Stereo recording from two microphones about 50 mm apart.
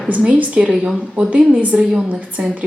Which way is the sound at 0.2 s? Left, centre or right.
Right.